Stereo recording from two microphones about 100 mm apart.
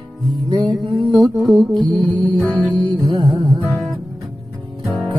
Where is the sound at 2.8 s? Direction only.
55° right (ahead or behind).